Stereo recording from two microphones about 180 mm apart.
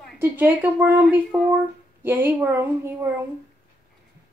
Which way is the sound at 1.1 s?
5° right (ahead or behind).